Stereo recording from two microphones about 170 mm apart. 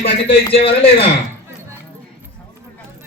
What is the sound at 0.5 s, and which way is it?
Speech, 35° left (ahead or behind).